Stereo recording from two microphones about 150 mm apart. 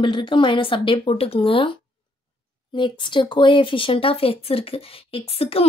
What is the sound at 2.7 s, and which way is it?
Speech, 30° left (ahead or behind).